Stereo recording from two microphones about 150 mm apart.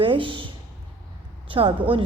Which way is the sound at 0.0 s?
35° right (ahead or behind).